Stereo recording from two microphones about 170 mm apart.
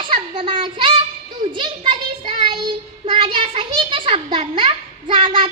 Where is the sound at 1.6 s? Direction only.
30° right (ahead or behind).